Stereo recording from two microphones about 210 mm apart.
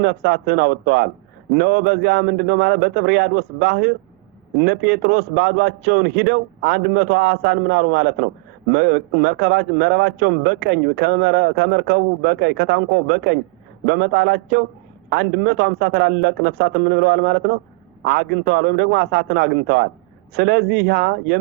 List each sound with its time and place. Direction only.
0.0 s a man's voice: 55° right (ahead or behind)